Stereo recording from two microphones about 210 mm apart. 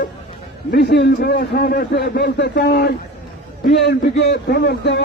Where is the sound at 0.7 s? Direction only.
50° left (ahead or behind).